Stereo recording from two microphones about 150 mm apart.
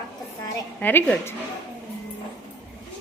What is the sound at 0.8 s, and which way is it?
Speech, 10° left (ahead or behind).